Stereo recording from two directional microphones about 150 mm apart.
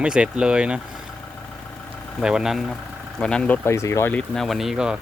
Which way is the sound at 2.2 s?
5° right (ahead or behind).